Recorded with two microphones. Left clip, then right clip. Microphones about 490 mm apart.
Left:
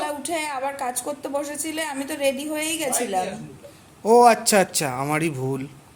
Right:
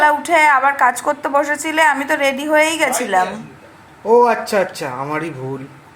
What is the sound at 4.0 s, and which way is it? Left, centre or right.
Speech, left.